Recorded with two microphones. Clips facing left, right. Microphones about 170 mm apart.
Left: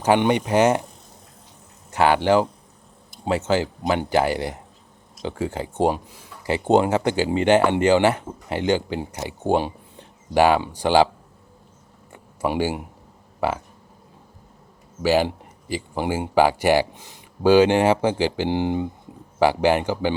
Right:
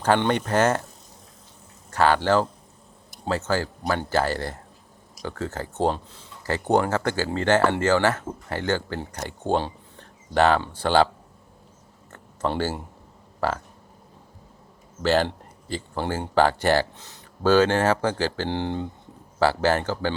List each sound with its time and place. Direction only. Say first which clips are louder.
0.0 s speech: left 3 dB; 15° left (ahead or behind)
1.9 s speech: left 2 dB; 15° left (ahead or behind)
12.1 s a sound: left 3 dB; 10° left (ahead or behind)
15.0 s speech: left 2 dB; 10° left (ahead or behind)